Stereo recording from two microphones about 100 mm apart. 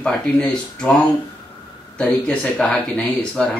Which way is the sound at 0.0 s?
10° left (ahead or behind).